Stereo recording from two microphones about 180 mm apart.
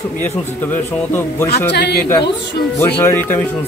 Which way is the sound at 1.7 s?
65° left (ahead or behind).